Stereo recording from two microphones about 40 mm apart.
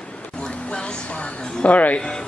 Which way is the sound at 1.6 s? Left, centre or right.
Left.